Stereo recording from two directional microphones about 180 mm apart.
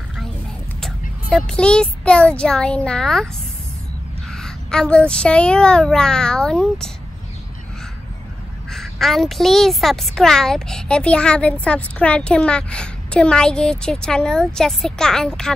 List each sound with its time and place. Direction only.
0.7 s a child's voice: 5° left (ahead or behind)
4.3 s a woman's voice: 5° left (ahead or behind)
8.6 s a woman's voice: centre (ahead or behind)